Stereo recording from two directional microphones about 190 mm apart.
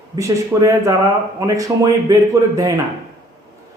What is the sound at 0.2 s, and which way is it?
A man's voice, 15° right (ahead or behind).